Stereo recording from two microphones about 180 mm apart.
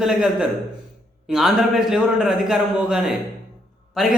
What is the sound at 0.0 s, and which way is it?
A man's voice, 5° right (ahead or behind).